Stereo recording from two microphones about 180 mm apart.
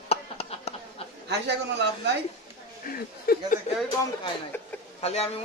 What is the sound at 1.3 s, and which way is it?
Speech, 70° right (ahead or behind).